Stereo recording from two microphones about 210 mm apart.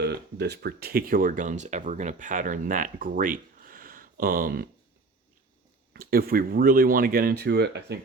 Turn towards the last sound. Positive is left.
turn(degrees=-50)  # may be behind; listen again after turning